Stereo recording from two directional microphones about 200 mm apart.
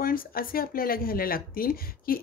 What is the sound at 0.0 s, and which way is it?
Speech, 45° left (ahead or behind).